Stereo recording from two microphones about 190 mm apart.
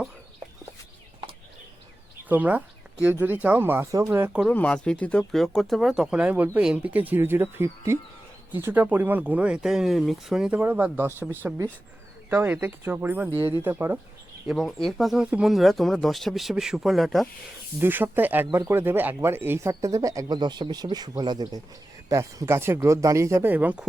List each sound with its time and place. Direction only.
2.3 s speech: 10° right (ahead or behind)
4.5 s speech: 5° left (ahead or behind)
17.7 s speech: 10° right (ahead or behind)